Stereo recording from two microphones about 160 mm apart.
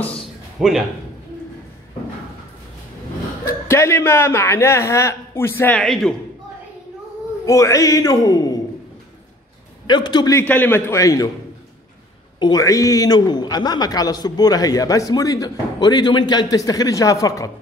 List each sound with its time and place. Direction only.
0.0 s a sound: 5° left (ahead or behind)
3.6 s a man's voice: 15° left (ahead or behind)
7.4 s a man's voice: 20° left (ahead or behind)
9.8 s a man's voice: 30° left (ahead or behind)
10.4 s a man's voice: 10° left (ahead or behind)
12.4 s a man's voice: 25° left (ahead or behind)